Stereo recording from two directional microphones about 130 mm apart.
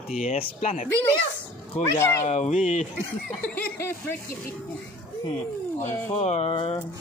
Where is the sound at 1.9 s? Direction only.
20° left (ahead or behind).